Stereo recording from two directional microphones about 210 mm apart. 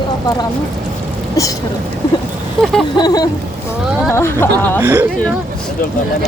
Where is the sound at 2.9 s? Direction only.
20° left (ahead or behind).